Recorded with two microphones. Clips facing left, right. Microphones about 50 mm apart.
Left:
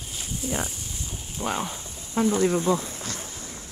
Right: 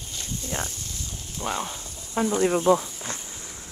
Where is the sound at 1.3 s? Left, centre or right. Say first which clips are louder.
Left 1 dB; centre.